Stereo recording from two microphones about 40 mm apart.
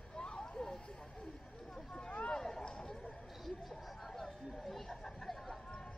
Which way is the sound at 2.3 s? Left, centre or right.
Centre.